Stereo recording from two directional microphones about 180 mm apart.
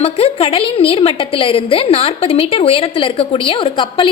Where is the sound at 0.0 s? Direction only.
35° left (ahead or behind).